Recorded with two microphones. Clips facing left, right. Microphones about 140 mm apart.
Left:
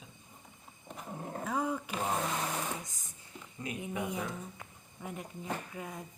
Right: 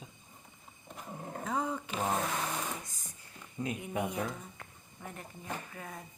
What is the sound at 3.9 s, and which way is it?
Speech, 20° right (ahead or behind).